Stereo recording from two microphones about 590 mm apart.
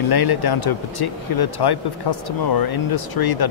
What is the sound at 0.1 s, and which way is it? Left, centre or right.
Speech, left.